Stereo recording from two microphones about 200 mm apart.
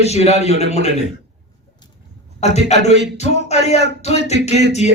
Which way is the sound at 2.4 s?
35° left (ahead or behind).